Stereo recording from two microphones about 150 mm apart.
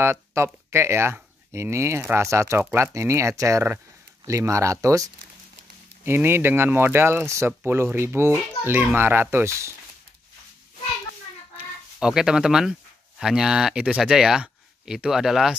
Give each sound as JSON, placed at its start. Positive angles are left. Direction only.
{"t": 0.0, "sound": "speech", "side_deg": -15}
{"t": 11.5, "sound": "a sound", "side_deg": -5}
{"t": 13.2, "sound": "speech", "side_deg": -5}